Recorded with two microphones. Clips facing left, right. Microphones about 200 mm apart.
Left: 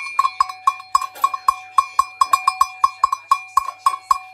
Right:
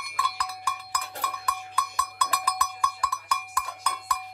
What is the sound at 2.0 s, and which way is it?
Cowbell, 25° right (ahead or behind).